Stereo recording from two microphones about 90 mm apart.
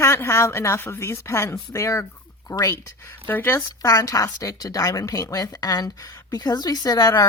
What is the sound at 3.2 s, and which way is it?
Speech, 25° left (ahead or behind).